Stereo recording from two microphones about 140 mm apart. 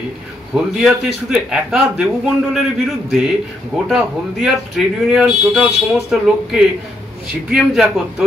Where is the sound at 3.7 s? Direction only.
5° right (ahead or behind).